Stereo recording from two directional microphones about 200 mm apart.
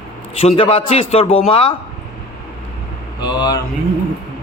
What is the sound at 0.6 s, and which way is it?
A man's voice, 25° left (ahead or behind).